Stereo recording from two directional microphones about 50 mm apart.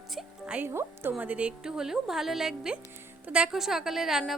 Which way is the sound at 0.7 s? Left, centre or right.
Right.